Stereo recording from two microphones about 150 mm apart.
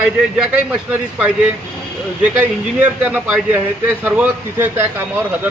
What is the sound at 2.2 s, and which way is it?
A man's voice, 10° right (ahead or behind).